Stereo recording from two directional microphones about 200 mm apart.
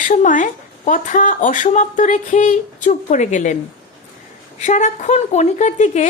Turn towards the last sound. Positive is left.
turn(degrees=35)  # may be behind; listen again after turning